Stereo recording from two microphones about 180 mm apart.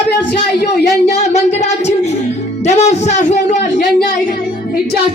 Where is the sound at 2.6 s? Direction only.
40° left (ahead or behind).